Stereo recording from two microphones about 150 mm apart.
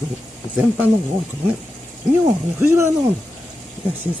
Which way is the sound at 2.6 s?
15° right (ahead or behind).